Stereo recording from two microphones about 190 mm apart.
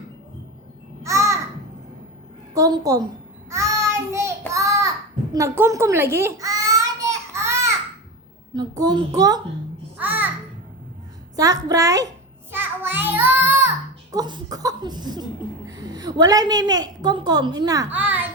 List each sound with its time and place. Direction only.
1.0 s a sound: 15° right (ahead or behind)
2.6 s a woman's voice: 20° right (ahead or behind)
4.1 s child singing: 15° right (ahead or behind)
5.3 s babbling: 15° right (ahead or behind)
8.8 s a woman's voice: 20° right (ahead or behind)
10.0 s a sound: 10° right (ahead or behind)
11.3 s a child's voice: 20° right (ahead or behind)
12.5 s child singing: 10° right (ahead or behind)
14.1 s a woman's voice: 20° right (ahead or behind)